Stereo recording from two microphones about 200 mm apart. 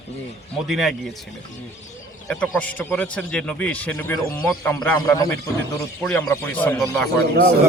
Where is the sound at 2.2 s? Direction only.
5° left (ahead or behind).